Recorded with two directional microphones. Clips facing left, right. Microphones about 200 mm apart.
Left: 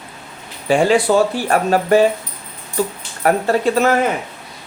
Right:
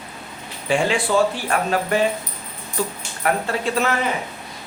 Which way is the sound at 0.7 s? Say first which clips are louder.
Left 6 dB; 40° left (ahead or behind).